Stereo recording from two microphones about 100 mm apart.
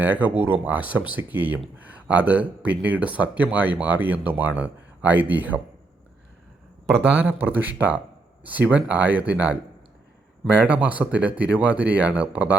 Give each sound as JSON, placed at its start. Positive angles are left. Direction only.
{"t": 0.0, "sound": "speech", "side_deg": -15}
{"t": 7.4, "sound": "speech", "side_deg": -20}